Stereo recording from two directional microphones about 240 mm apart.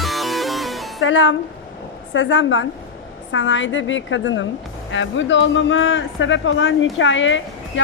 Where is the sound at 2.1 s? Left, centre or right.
Left.